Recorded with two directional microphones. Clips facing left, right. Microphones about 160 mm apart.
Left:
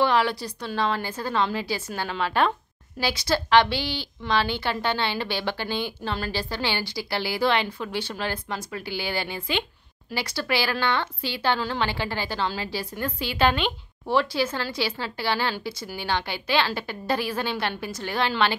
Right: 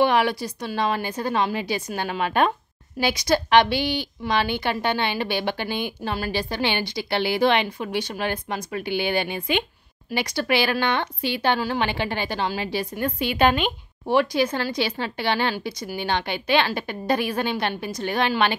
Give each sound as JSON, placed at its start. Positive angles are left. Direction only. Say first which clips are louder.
{"t": 0.0, "sound": "speech", "louder": "right 2 dB", "side_deg": -15}